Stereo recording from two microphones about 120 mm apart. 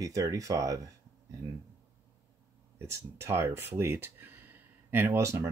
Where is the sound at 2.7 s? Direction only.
25° right (ahead or behind).